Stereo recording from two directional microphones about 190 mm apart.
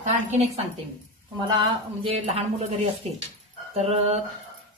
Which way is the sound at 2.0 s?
30° right (ahead or behind).